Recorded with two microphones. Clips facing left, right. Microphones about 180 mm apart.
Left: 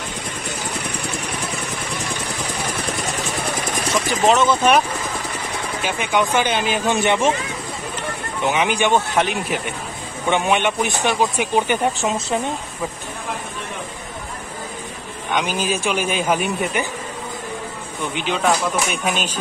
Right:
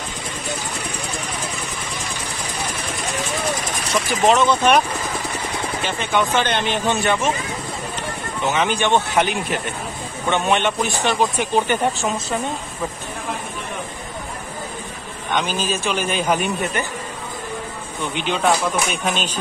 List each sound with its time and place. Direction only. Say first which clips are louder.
4.3 s speech: even; centre (ahead or behind)
5.9 s speech: left 1 dB; 15° left (ahead or behind)
7.0 s speech: left 2 dB; 25° left (ahead or behind)
8.5 s speech: left 1 dB; 15° left (ahead or behind)
9.1 s speech: even; centre (ahead or behind)
10.2 s speech: left 1 dB; 10° left (ahead or behind)
15.3 s speech: left 1 dB; 10° left (ahead or behind)
18.1 s speech: even; centre (ahead or behind)